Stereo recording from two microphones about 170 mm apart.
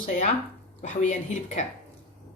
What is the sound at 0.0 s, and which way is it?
Speech, 45° left (ahead or behind).